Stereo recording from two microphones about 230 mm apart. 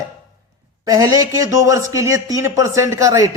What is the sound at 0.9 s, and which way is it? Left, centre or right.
A man's voice, centre.